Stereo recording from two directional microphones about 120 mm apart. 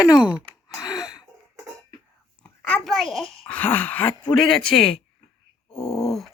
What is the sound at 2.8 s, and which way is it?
Speech, centre (ahead or behind).